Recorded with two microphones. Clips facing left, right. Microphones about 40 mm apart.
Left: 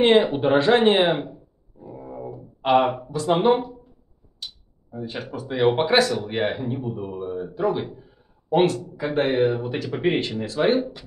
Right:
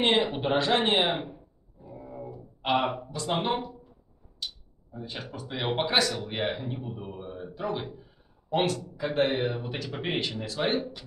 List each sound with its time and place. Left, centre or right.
0.0 s speech: centre
2.0 s dog: left
2.3 s speech: centre
4.9 s speech: centre